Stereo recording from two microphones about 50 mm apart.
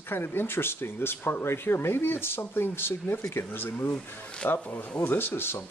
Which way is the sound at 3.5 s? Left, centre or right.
Left.